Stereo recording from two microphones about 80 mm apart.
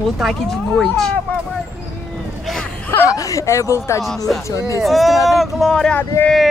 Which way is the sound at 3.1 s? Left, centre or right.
Left.